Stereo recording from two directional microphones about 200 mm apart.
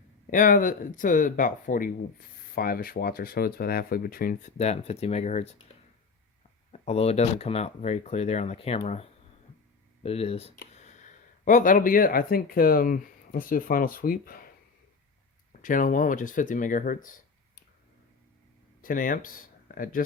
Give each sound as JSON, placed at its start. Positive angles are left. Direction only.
{"t": 0.3, "sound": "speech", "side_deg": 40}
{"t": 6.7, "sound": "speech", "side_deg": 30}
{"t": 15.6, "sound": "speech", "side_deg": 40}
{"t": 18.8, "sound": "speech", "side_deg": 45}